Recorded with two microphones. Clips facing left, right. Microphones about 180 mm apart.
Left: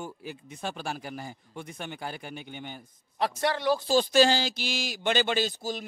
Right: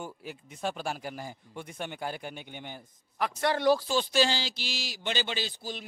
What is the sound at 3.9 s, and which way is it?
A man's voice, 45° left (ahead or behind).